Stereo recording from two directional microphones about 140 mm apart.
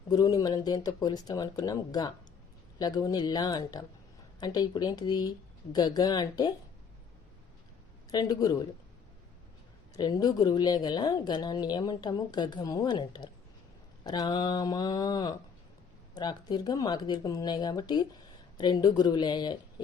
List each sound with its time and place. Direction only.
0.1 s speech: 30° left (ahead or behind)
8.1 s speech: 30° left (ahead or behind)
9.9 s speech: 30° left (ahead or behind)